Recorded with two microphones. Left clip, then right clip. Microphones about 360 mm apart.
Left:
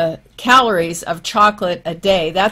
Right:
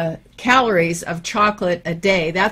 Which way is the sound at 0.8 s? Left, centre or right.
Right.